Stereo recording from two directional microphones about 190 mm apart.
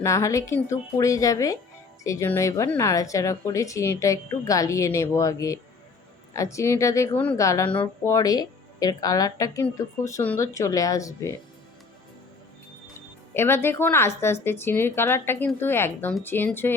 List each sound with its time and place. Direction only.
0.0 s a woman's voice: 15° left (ahead or behind)
13.3 s a woman's voice: 10° left (ahead or behind)